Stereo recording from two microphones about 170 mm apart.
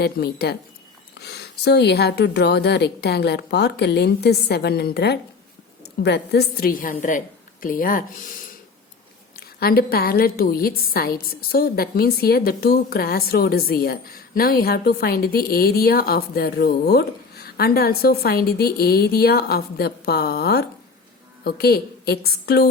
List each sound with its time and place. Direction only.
0.0 s a woman's voice: 70° left (ahead or behind)